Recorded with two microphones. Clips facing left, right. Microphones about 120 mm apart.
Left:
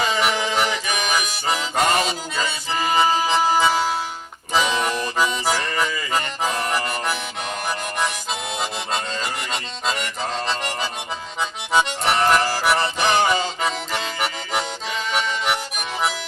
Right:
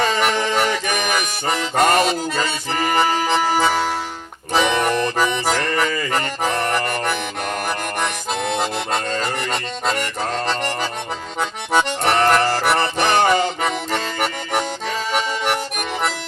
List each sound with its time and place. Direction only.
0.0 s music: 50° right (ahead or behind)
11.3 s accordion: 55° right (ahead or behind)
12.5 s music: 55° right (ahead or behind)